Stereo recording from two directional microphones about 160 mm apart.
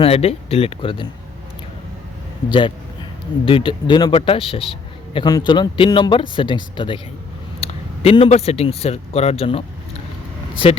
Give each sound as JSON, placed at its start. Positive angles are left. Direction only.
{"t": 0.0, "sound": "speech", "side_deg": 40}
{"t": 2.5, "sound": "speech", "side_deg": 30}